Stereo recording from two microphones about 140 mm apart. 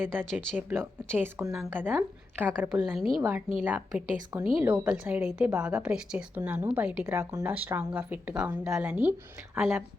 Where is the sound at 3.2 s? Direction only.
20° right (ahead or behind).